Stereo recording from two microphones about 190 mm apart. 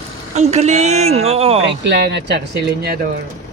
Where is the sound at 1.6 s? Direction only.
65° right (ahead or behind).